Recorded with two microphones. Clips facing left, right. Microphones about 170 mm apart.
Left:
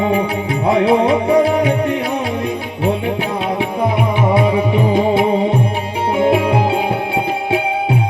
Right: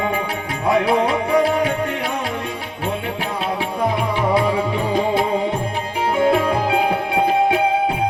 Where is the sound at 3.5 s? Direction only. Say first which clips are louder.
Left 3 dB; 15° left (ahead or behind).